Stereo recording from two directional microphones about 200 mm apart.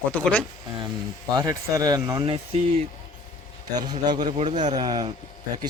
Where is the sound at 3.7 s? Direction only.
20° right (ahead or behind).